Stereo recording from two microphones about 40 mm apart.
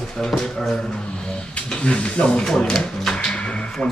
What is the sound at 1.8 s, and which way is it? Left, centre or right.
Speech, left.